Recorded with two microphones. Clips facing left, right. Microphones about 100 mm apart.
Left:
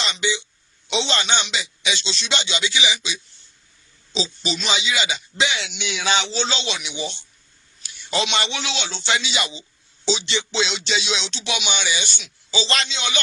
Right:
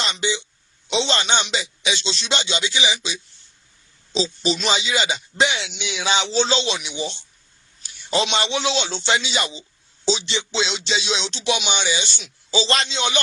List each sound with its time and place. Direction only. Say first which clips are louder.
0.0 s speech: even; 35° right (ahead or behind)
5.8 s music: even; 20° right (ahead or behind)
6.3 s a man's voice: right 5 dB; 35° right (ahead or behind)
10.2 s music: even; 25° right (ahead or behind)